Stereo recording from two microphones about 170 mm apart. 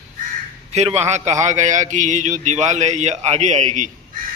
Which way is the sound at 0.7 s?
40° right (ahead or behind).